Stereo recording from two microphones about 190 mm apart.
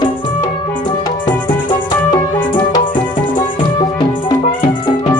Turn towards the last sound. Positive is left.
turn(degrees=20)  # may be behind; listen again after turning